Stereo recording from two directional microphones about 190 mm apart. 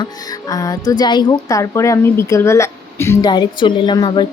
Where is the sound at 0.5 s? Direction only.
20° left (ahead or behind).